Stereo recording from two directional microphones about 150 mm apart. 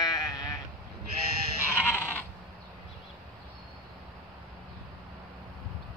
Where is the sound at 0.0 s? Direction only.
25° left (ahead or behind).